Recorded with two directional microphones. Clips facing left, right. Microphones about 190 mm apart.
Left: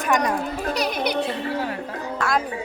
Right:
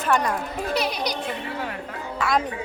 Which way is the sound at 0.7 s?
45° left (ahead or behind).